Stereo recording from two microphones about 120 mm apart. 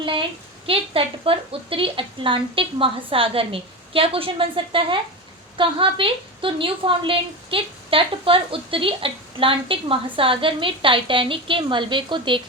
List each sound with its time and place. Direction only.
0.0 s a woman's voice: 45° right (ahead or behind)